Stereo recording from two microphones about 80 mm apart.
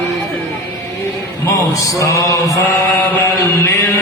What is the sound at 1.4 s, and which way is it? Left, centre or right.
Mantra, left.